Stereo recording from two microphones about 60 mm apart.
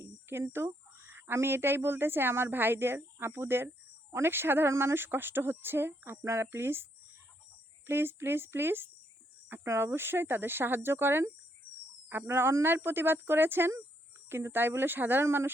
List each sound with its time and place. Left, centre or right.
0.5 s speech: right
4.7 s speech: right
4.9 s speech: right
7.9 s speech: right
12.3 s speech: right
12.7 s speech: right
15.2 s speech: right